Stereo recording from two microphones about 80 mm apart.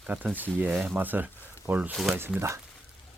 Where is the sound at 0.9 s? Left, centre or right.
Right.